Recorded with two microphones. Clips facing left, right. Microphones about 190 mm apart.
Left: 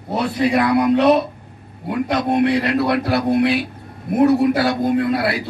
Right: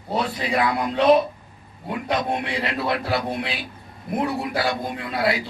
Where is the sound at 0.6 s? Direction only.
70° left (ahead or behind).